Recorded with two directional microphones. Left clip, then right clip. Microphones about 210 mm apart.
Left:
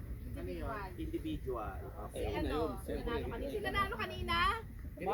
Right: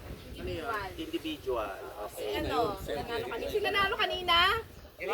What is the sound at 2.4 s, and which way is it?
Speech, 45° left (ahead or behind).